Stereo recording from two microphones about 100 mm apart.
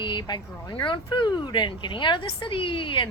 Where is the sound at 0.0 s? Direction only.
50° left (ahead or behind).